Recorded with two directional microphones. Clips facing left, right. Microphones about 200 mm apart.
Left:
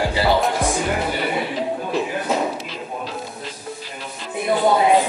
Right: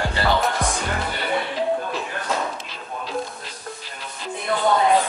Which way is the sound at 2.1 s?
15° left (ahead or behind).